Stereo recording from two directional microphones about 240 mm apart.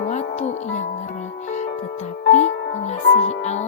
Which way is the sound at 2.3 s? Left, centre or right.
Left.